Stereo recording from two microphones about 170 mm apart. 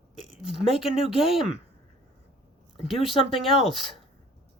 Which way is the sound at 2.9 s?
Centre (ahead or behind).